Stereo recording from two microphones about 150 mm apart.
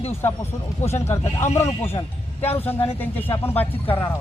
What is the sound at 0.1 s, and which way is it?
Speech, 15° left (ahead or behind).